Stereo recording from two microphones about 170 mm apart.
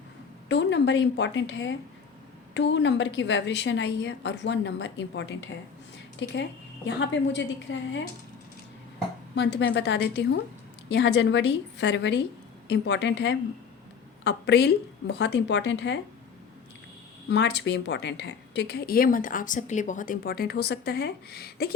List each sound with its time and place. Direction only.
0.4 s a woman's voice: 90° left
9.3 s a woman's voice: 90° left
10.8 s a woman's voice: 90° left
14.3 s a woman's voice: 80° left
17.2 s a woman's voice: 90° left; by 21.7 s 70° left (ahead or behind)